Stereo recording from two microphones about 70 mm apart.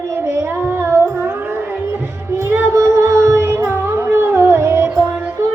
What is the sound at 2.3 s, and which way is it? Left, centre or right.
Music, right.